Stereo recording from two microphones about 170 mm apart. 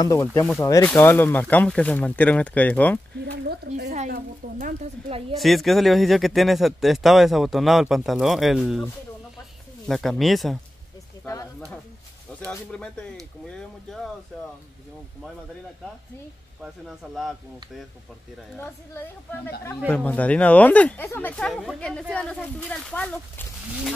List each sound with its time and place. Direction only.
0.0 s speech: 15° left (ahead or behind)
3.4 s speech: 80° right
4.1 s speech: 50° right (ahead or behind)
5.3 s speech: centre (ahead or behind)
9.8 s speech: centre (ahead or behind)
12.4 s speech: 5° left (ahead or behind)
13.5 s a sound: centre (ahead or behind)
16.6 s speech: centre (ahead or behind)
18.6 s speech: 15° left (ahead or behind)